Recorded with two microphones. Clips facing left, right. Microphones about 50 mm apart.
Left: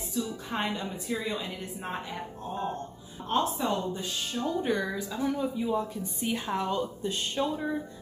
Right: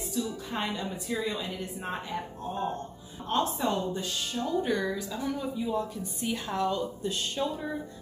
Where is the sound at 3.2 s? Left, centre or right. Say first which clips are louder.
Even; centre.